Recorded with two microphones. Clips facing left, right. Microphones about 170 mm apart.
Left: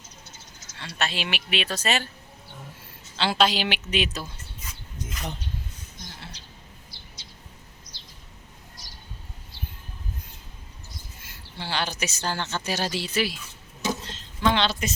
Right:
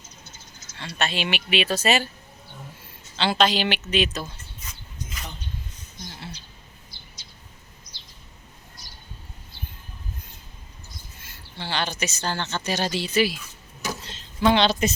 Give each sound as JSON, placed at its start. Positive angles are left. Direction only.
{"t": 0.9, "sound": "speech", "side_deg": 0}
{"t": 3.2, "sound": "a woman's voice", "side_deg": 5}
{"t": 6.9, "sound": "bird", "side_deg": 35}
{"t": 11.2, "sound": "a woman's voice", "side_deg": 10}
{"t": 14.1, "sound": "a sound", "side_deg": -10}